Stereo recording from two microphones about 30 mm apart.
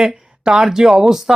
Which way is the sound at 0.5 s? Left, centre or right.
Centre.